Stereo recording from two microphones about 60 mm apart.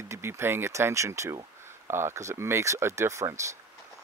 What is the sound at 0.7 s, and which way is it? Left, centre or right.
Speech, right.